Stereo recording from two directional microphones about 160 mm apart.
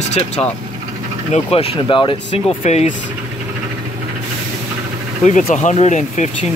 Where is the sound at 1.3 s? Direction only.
35° left (ahead or behind).